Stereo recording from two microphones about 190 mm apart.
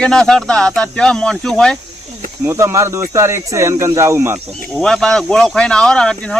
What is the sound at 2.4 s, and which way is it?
Speech, 15° right (ahead or behind).